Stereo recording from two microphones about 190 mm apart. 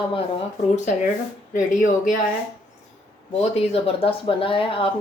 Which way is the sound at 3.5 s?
30° left (ahead or behind).